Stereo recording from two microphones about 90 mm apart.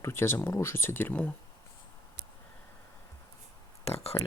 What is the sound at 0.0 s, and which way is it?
Speech, 30° left (ahead or behind).